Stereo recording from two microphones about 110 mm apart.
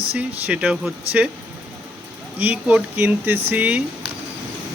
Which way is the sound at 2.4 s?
15° right (ahead or behind).